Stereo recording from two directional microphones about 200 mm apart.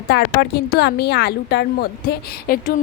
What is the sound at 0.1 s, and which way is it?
A woman's voice, 55° left (ahead or behind).